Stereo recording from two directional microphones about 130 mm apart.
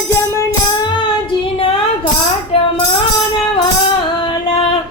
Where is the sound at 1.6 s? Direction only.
45° left (ahead or behind).